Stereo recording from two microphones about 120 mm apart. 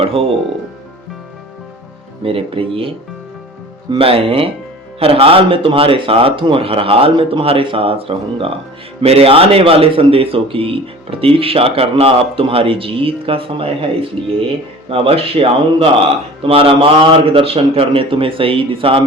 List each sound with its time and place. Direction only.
0.0 s speech: 55° right (ahead or behind)
2.2 s speech: 50° right (ahead or behind)